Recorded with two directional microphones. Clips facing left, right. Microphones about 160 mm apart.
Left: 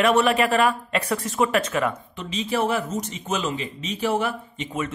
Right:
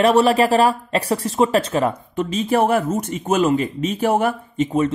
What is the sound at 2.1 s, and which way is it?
A man's voice, 50° right (ahead or behind).